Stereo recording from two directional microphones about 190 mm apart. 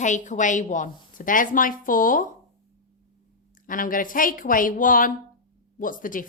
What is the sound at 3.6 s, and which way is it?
A woman's voice, 45° left (ahead or behind).